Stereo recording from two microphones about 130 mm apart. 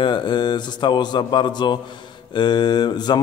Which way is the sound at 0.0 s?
35° left (ahead or behind).